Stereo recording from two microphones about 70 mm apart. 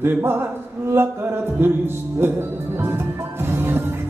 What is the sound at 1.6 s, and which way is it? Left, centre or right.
Music, right.